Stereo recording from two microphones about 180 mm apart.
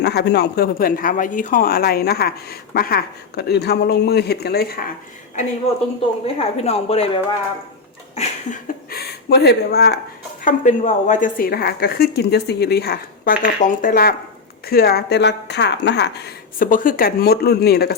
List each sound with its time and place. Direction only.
0.0 s speech: 65° left (ahead or behind)
6.2 s a woman's voice: 35° left (ahead or behind)
8.1 s a sound: 35° left (ahead or behind)
8.9 s speech: 60° left (ahead or behind)
10.4 s speech: 45° left (ahead or behind)